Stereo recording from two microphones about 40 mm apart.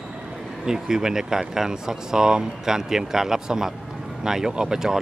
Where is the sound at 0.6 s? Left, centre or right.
Centre.